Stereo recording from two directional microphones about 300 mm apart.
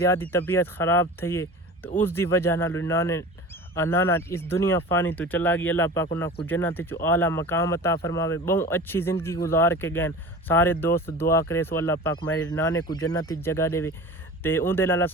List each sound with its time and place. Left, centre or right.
0.0 s speech: centre